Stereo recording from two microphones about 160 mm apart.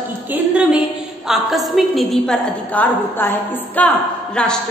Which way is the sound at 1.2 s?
Centre (ahead or behind).